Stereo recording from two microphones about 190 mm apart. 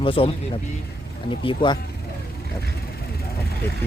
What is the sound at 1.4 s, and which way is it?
Speech, 25° left (ahead or behind).